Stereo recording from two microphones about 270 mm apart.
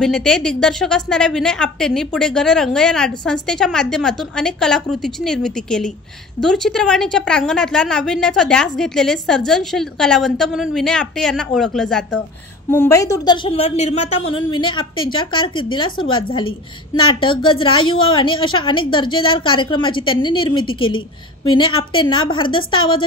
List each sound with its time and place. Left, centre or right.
0.0 s a woman's voice: centre